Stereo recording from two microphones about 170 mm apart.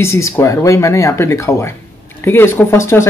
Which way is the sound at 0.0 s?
15° left (ahead or behind).